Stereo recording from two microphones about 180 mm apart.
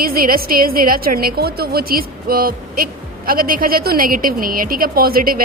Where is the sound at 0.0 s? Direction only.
55° right (ahead or behind).